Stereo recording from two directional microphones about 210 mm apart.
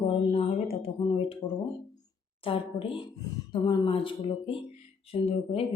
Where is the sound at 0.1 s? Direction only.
25° left (ahead or behind).